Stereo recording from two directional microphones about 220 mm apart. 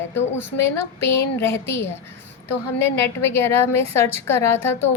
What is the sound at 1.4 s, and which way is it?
A woman's voice, 10° left (ahead or behind).